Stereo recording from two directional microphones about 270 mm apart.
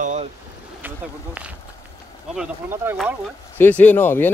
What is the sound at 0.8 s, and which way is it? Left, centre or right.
Speech, centre.